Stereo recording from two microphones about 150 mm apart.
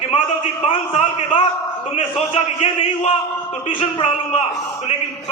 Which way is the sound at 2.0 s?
50° left (ahead or behind).